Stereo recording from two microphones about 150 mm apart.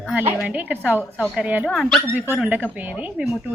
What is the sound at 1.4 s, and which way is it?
Speech, 10° right (ahead or behind).